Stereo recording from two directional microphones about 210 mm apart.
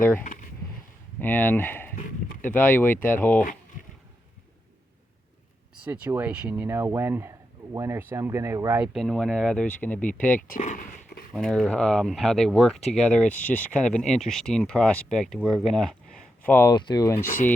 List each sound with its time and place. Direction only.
1.2 s speech: 10° left (ahead or behind)
5.8 s speech: 10° right (ahead or behind)
10.2 s speech: 40° left (ahead or behind)
11.3 s speech: centre (ahead or behind)